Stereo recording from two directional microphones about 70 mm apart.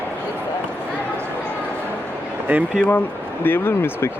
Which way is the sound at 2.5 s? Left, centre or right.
Right.